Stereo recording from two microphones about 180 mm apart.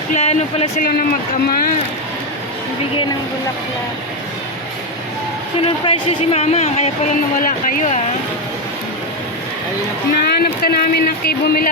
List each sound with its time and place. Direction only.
0.1 s speech: 35° left (ahead or behind)
1.5 s speech: 55° left (ahead or behind)
5.6 s speech: 30° left (ahead or behind)
10.2 s speech: 60° left (ahead or behind)